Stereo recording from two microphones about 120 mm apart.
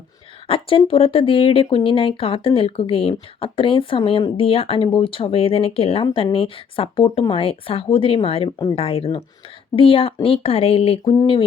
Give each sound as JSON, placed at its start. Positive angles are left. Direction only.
{"t": 0.4, "sound": "speech", "side_deg": 50}